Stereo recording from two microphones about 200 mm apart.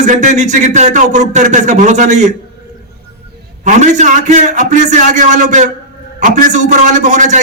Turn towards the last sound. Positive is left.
turn(degrees=-35)  # may be behind; listen again after turning